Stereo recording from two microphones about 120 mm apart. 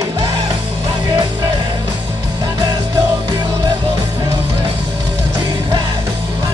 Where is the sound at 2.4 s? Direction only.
35° right (ahead or behind).